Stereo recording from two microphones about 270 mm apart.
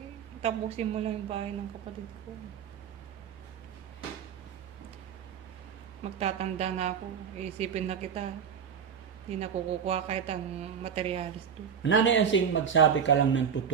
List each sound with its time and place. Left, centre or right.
0.4 s a woman's voice: right
6.0 s a woman's voice: right
9.3 s a woman's voice: right
11.8 s speech: left